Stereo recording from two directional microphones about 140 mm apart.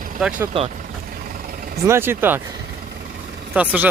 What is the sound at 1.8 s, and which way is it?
Speech, 15° right (ahead or behind).